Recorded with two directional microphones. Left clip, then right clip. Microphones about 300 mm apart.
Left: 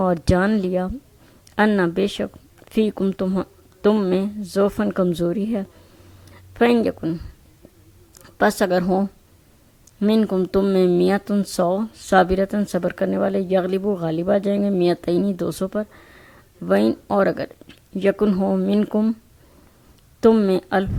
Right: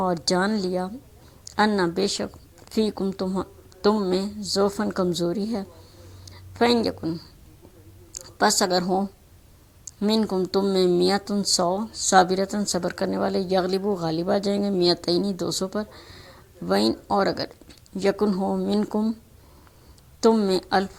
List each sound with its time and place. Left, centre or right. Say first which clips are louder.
0.0 s speech: left 4 dB; left
8.1 s a sound: left 2 dB; left
9.8 s speech: left 4 dB; left
11.9 s speech: right 11 dB; left
12.1 s speech: left 2 dB; left
20.2 s speech: left 4 dB; left